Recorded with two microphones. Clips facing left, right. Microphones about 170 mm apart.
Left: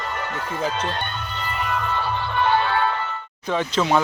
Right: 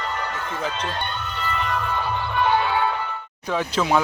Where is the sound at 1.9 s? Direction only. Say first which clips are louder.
Even; 10° right (ahead or behind).